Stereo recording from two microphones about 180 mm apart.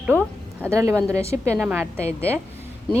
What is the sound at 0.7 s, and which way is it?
A woman's voice, 15° right (ahead or behind).